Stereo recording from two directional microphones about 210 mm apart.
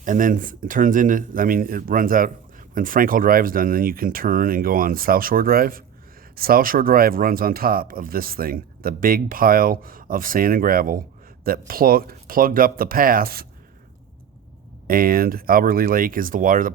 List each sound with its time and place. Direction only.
0.0 s speech: 40° right (ahead or behind)
14.8 s speech: 45° right (ahead or behind)